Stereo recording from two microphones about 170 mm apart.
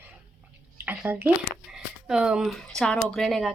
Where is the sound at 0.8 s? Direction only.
10° right (ahead or behind).